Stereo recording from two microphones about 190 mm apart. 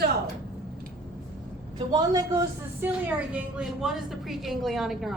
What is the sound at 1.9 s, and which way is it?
Speech, 20° right (ahead or behind).